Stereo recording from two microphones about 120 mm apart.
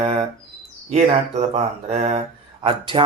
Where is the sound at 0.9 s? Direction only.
70° right (ahead or behind).